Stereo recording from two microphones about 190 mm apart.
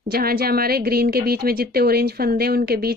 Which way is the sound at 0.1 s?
55° right (ahead or behind).